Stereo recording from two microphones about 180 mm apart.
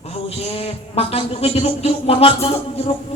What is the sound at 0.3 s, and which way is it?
Speech, 35° left (ahead or behind).